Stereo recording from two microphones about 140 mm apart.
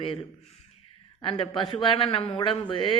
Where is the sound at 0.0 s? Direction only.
40° left (ahead or behind).